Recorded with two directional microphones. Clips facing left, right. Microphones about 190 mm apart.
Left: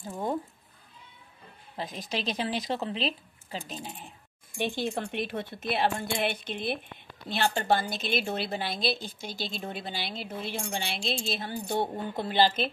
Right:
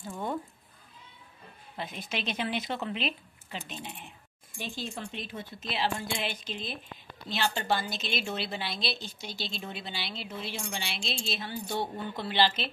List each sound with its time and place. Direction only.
1.8 s a woman's voice: 35° left (ahead or behind)
4.6 s speech: 65° left (ahead or behind)
7.2 s a woman's voice: 50° left (ahead or behind)